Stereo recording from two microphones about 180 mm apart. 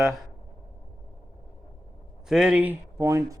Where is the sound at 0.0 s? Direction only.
Centre (ahead or behind).